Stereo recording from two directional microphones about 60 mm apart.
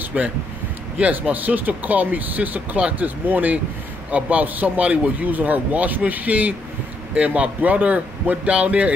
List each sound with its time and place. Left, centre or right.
0.1 s speech: centre